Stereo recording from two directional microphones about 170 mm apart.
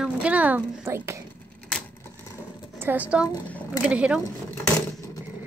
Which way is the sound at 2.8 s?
10° right (ahead or behind).